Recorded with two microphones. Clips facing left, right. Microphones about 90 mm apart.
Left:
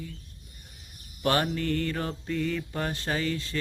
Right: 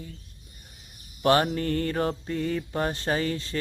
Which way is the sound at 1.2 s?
30° right (ahead or behind).